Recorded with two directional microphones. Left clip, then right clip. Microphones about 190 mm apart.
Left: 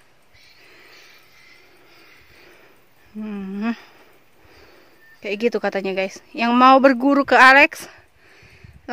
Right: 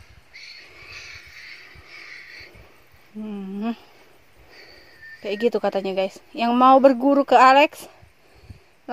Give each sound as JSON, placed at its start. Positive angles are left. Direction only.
{"t": 0.9, "sound": "insect", "side_deg": 0}
{"t": 3.2, "sound": "a sound", "side_deg": 20}
{"t": 5.2, "sound": "speech", "side_deg": 40}
{"t": 6.5, "sound": "a woman's voice", "side_deg": 15}